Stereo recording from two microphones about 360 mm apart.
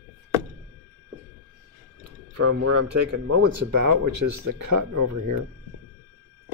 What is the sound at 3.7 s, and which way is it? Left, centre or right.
Speech, right.